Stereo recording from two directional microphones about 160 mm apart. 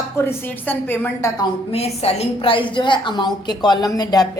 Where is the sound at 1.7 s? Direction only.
40° left (ahead or behind).